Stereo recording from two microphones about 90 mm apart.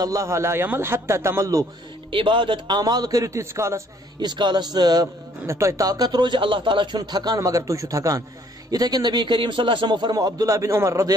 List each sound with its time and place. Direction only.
0.0 s a man's voice: 40° right (ahead or behind)
2.0 s speech: 75° right (ahead or behind)
2.8 s a man's voice: 45° right (ahead or behind)
4.2 s a man's voice: 55° right (ahead or behind)
5.0 s a man's voice: 35° right (ahead or behind); by 7.0 s 65° right (ahead or behind)
7.0 s a man's voice: 50° right (ahead or behind)